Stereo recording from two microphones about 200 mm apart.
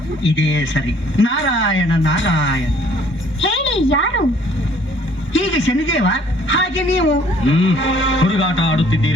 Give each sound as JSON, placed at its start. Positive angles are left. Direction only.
{"t": 0.3, "sound": "a woman's voice", "side_deg": 70}
{"t": 5.3, "sound": "a woman's voice", "side_deg": 70}